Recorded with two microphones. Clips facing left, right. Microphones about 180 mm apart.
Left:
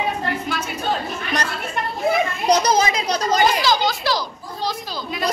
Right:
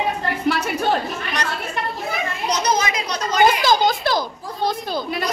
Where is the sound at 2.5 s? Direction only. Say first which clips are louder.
Left 4 dB; 35° left (ahead or behind).